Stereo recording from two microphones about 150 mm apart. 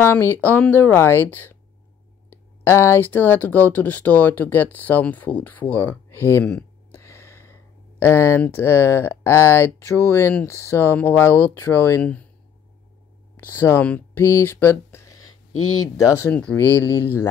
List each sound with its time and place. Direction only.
0.0 s speech: 15° left (ahead or behind)
2.6 s speech: 15° left (ahead or behind)
13.4 s speech: 15° left (ahead or behind)
16.3 s speech: 10° left (ahead or behind)